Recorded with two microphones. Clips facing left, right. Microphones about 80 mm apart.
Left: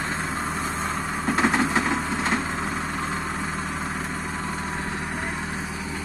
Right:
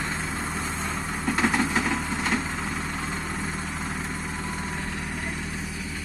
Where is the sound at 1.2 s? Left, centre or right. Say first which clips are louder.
Left 2 dB; left.